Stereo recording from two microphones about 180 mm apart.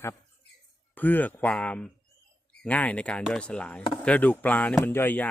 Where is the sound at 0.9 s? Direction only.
10° left (ahead or behind).